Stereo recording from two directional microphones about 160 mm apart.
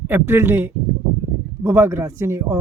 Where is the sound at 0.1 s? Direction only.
15° right (ahead or behind).